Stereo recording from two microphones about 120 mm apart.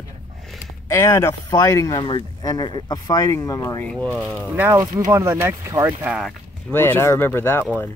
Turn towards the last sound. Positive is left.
turn(degrees=20)  # may be behind; listen again after turning